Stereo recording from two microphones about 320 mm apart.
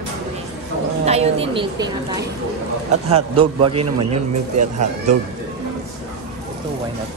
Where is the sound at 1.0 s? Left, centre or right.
Centre.